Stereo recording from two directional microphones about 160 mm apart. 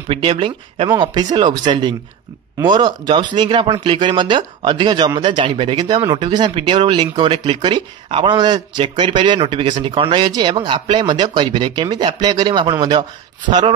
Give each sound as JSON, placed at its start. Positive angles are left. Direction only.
{"t": 0.1, "sound": "speech", "side_deg": -35}